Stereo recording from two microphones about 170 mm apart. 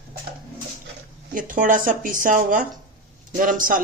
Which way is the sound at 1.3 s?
50° right (ahead or behind).